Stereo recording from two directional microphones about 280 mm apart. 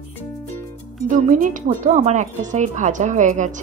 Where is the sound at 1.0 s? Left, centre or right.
Right.